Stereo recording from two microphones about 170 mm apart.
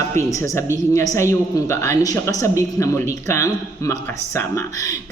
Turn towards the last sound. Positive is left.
turn(degrees=15)  # may be behind; listen again after turning